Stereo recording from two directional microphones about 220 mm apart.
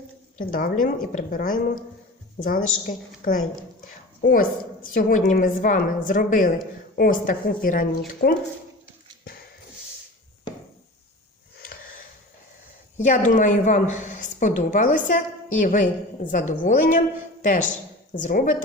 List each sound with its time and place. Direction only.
0.5 s a woman's voice: 40° left (ahead or behind)
3.8 s dog: 40° left (ahead or behind)
4.9 s a woman's voice: 40° left (ahead or behind)
13.0 s a woman's voice: 35° left (ahead or behind)